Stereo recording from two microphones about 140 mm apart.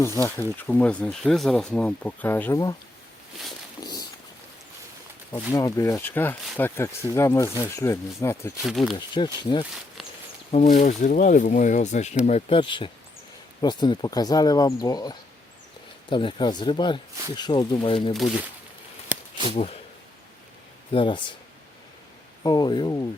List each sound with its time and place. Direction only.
0.2 s speech: 15° left (ahead or behind)
3.8 s a sound: 25° left (ahead or behind)
5.5 s speech: 25° left (ahead or behind)
8.6 s speech: centre (ahead or behind)
9.0 s speech: 30° left (ahead or behind)
10.5 s speech: 55° left (ahead or behind)
12.2 s speech: 45° left (ahead or behind)
19.1 s a sound: 10° right (ahead or behind)
20.9 s speech: 35° left (ahead or behind)
22.4 s speech: 30° left (ahead or behind)